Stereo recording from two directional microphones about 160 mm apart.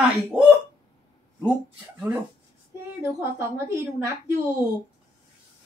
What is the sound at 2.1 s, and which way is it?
Speech, 10° right (ahead or behind).